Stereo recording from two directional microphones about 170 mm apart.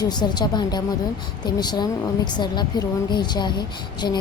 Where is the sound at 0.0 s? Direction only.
25° left (ahead or behind).